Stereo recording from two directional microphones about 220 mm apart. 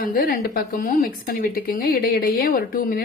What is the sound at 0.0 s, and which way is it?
Speech, 40° left (ahead or behind).